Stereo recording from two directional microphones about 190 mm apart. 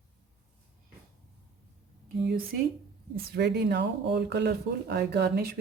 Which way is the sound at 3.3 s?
60° right (ahead or behind).